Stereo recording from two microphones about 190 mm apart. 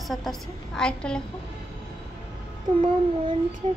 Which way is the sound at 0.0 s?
Centre (ahead or behind).